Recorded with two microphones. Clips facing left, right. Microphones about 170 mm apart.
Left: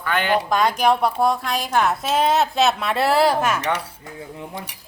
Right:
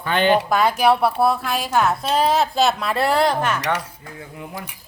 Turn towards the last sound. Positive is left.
turn(degrees=10)  # may be behind; listen again after turning